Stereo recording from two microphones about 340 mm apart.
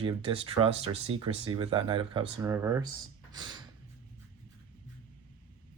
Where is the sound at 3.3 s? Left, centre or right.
Centre.